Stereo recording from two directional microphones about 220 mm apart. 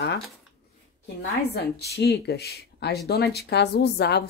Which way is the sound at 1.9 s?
50° left (ahead or behind).